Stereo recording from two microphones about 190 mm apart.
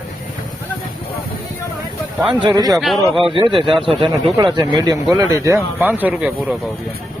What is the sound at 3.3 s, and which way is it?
Speech, 25° right (ahead or behind).